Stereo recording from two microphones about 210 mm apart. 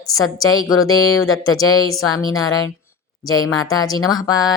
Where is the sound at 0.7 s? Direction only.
80° left.